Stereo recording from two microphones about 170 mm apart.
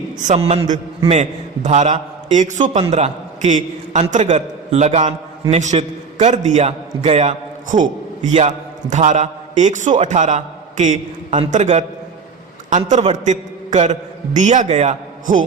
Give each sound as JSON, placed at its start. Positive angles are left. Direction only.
{"t": 0.2, "sound": "a man's voice", "side_deg": -40}